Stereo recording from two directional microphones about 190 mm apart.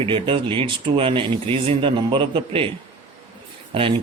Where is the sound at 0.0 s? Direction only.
25° right (ahead or behind).